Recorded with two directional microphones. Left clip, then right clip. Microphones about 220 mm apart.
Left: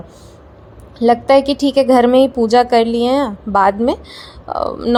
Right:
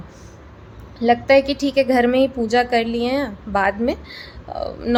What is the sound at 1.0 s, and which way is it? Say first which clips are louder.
Speech: left 4 dB; 25° left (ahead or behind).